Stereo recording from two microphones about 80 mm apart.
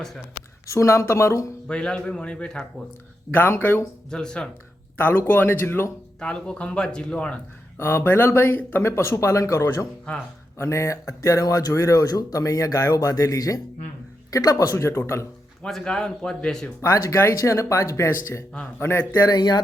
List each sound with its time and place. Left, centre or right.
0.7 s speech: left
1.6 s speech: centre
3.3 s speech: left
4.1 s speech: centre
4.9 s speech: left
6.1 s speech: centre
7.8 s speech: left
15.6 s speech: centre
16.8 s speech: left
19.3 s speech: left